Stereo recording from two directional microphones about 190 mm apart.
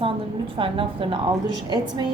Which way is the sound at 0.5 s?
25° right (ahead or behind).